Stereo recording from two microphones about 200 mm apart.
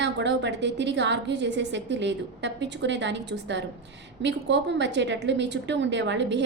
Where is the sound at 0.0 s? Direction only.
60° right (ahead or behind).